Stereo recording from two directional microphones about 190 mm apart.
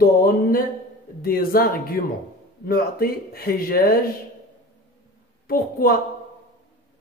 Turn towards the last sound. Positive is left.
turn(degrees=50)  # may be behind; listen again after turning